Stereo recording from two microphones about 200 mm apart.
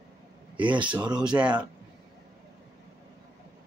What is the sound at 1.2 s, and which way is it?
Speech, 5° right (ahead or behind).